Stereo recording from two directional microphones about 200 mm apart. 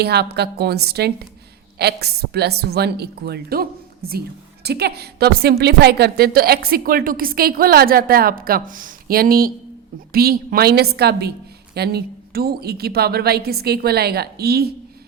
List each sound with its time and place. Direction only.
0.0 s a woman's voice: 55° right (ahead or behind)